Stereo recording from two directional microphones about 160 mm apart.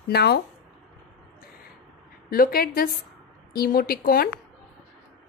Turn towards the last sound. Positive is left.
turn(degrees=70)  # may be behind; listen again after turning